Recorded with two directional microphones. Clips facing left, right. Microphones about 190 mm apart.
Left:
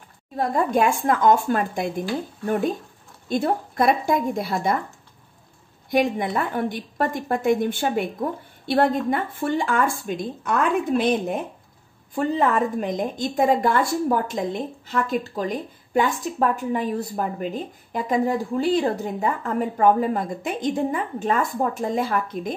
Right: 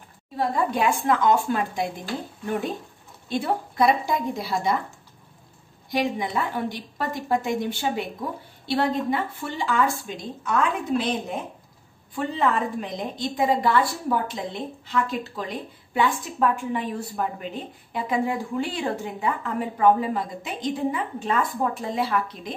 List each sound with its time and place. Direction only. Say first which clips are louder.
0.4 s a woman's voice: left 3 dB; 45° left (ahead or behind)
3.3 s a woman's voice: left 3 dB; 45° left (ahead or behind)
5.9 s a woman's voice: left 4 dB; 50° left (ahead or behind)
12.2 s a woman's voice: left 3 dB; 45° left (ahead or behind)